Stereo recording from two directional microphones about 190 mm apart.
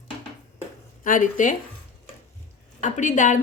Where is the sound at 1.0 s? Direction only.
45° left (ahead or behind).